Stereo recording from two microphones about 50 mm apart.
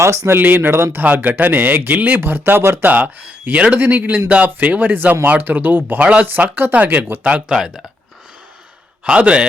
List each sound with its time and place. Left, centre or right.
0.0 s speech: right
0.3 s speech: right
1.0 s speech: right
2.8 s speech: right
3.8 s speech: right
7.3 s speech: centre
9.0 s a man's voice: right